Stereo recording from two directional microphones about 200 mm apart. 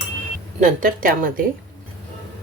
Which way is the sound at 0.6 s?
40° right (ahead or behind).